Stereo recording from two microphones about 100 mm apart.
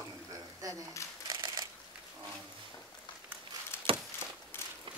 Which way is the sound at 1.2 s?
45° right (ahead or behind).